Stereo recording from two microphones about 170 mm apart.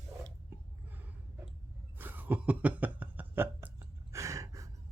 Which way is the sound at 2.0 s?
10° right (ahead or behind).